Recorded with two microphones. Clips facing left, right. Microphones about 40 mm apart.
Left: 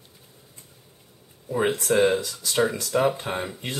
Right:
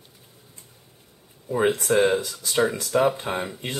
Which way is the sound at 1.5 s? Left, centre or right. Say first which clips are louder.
Right 2 dB; centre.